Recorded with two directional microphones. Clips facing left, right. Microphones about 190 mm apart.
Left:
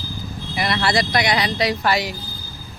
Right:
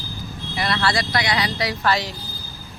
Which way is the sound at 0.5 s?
15° left (ahead or behind).